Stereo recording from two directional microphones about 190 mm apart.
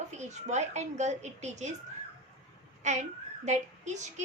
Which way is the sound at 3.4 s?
40° right (ahead or behind).